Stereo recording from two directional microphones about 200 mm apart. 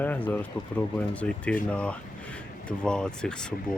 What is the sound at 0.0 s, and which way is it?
Speech, 10° left (ahead or behind).